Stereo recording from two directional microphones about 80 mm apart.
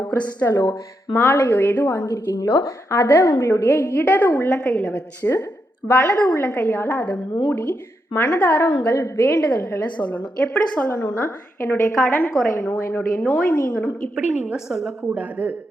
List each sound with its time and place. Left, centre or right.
0.1 s a woman's voice: left
0.5 s speech: left
1.1 s a woman's voice: left
2.0 s a woman's voice: left
3.1 s a woman's voice: left
9.8 s a woman's voice: centre
11.0 s a woman's voice: left
14.2 s a woman's voice: centre
14.7 s a woman's voice: centre
15.1 s a man's voice: right